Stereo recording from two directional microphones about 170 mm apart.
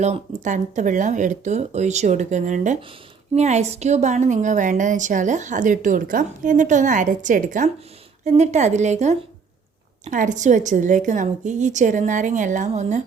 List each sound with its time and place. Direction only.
0.0 s a woman's voice: 45° right (ahead or behind)